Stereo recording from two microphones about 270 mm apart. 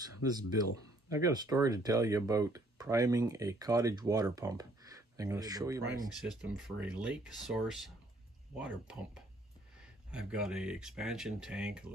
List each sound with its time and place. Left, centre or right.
0.2 s speech: left
1.1 s speech: centre